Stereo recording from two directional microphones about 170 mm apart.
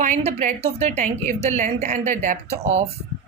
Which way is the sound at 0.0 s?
45° right (ahead or behind).